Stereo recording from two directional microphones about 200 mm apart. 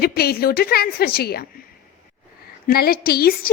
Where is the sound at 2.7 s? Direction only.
50° left (ahead or behind).